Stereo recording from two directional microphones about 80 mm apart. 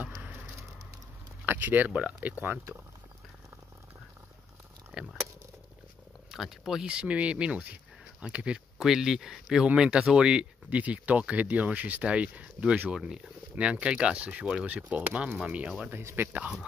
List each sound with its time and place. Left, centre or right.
0.2 s a sound: right
1.9 s speech: centre
4.9 s speech: centre
6.3 s speech: centre
15.9 s speech: right